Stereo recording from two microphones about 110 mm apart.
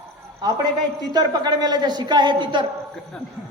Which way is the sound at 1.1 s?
40° right (ahead or behind).